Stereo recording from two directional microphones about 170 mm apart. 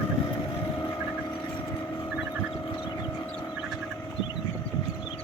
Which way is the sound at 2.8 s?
25° left (ahead or behind).